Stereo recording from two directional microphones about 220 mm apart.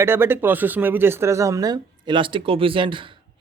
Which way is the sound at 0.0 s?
10° right (ahead or behind).